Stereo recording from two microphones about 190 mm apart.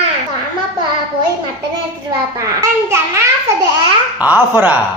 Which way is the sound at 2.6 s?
15° right (ahead or behind).